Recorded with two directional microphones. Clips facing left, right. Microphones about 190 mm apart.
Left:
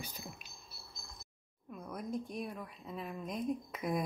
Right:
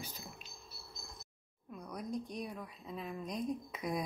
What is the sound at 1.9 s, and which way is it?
A woman's voice, 5° left (ahead or behind).